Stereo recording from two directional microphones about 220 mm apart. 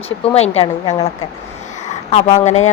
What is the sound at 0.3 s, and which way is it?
Speech, 30° left (ahead or behind).